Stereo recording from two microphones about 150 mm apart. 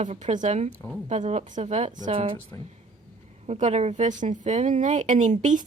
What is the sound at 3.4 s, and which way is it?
A woman's voice, 50° right (ahead or behind).